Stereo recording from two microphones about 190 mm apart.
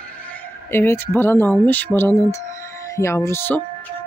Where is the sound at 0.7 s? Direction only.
10° left (ahead or behind).